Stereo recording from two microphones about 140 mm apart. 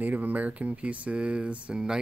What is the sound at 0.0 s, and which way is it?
Speech, 10° right (ahead or behind).